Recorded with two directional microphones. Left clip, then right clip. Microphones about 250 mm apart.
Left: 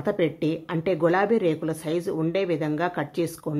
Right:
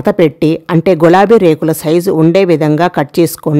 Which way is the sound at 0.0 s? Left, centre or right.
Right.